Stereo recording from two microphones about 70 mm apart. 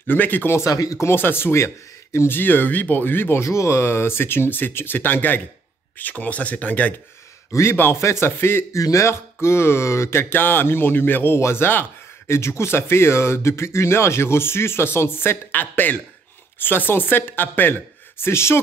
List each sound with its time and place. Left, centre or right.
0.0 s speech: left
0.6 s speech: left
1.0 s speech: left
7.5 s speech: left
8.7 s speech: left